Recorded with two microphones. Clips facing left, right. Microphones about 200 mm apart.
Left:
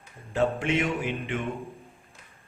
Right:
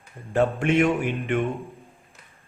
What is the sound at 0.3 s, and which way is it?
Speech, 50° right (ahead or behind).